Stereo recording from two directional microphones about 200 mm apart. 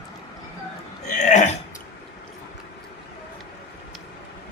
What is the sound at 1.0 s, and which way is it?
Burping, 40° left (ahead or behind).